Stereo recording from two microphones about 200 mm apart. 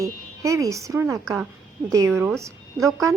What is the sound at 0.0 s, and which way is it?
A woman's voice, 15° right (ahead or behind).